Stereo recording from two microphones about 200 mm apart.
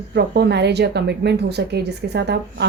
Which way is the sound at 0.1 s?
55° right (ahead or behind).